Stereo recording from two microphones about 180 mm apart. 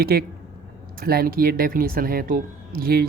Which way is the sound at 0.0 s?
60° right (ahead or behind).